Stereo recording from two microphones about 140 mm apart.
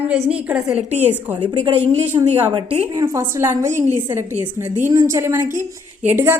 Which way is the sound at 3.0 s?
20° right (ahead or behind).